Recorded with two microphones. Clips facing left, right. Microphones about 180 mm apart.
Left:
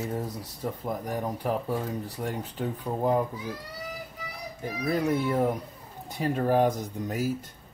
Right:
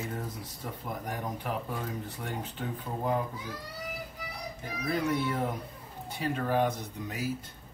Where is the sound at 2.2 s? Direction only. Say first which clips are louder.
Left 5 dB; 35° left (ahead or behind).